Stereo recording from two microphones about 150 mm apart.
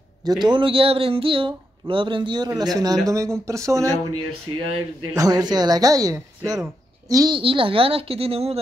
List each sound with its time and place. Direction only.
0.2 s speech: 30° right (ahead or behind)